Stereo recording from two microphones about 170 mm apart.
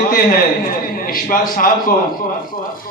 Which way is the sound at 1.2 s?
55° left (ahead or behind).